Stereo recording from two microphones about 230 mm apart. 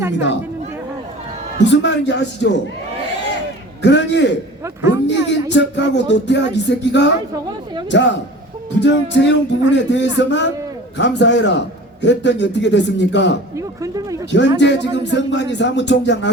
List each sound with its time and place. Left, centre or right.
1.5 s speech: left
3.8 s speech: left
4.6 s speech: centre
5.0 s speech: left
13.6 s speech: centre
14.3 s speech: left